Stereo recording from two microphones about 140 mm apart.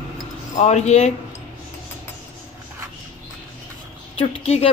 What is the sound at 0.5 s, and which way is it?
Speech, 55° left (ahead or behind).